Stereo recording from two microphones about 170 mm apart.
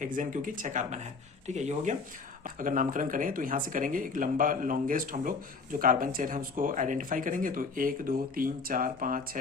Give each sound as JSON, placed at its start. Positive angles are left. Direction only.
{"t": 0.0, "sound": "speech", "side_deg": -50}